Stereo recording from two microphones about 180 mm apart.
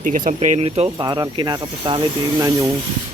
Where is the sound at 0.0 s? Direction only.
45° right (ahead or behind); by 2.0 s 25° right (ahead or behind).